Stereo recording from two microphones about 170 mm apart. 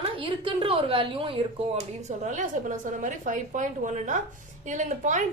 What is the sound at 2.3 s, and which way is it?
A woman's voice, 45° right (ahead or behind).